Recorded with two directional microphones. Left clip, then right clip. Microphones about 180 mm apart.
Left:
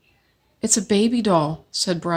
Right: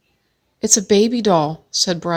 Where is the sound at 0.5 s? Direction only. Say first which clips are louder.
Right 6 dB; 40° right (ahead or behind).